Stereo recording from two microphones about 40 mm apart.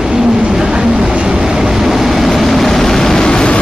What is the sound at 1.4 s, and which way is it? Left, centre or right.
Vehicle, centre.